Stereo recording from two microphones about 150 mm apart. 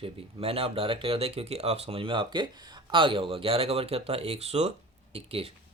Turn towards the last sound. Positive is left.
turn(degrees=-40)  # may be behind; listen again after turning